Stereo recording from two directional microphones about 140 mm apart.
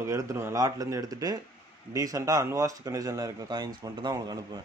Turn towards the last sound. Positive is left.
turn(degrees=-30)  # may be behind; listen again after turning